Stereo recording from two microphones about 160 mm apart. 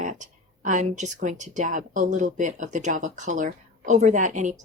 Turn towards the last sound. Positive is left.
turn(degrees=-50)  # may be behind; listen again after turning